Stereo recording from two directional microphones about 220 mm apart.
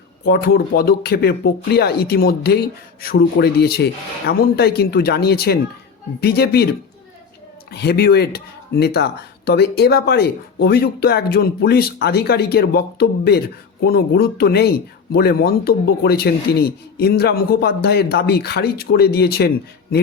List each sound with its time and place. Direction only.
0.3 s speech: 45° left (ahead or behind)
7.7 s speech: 45° left (ahead or behind)